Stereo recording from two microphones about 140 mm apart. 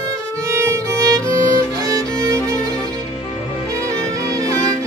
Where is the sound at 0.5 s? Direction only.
20° right (ahead or behind).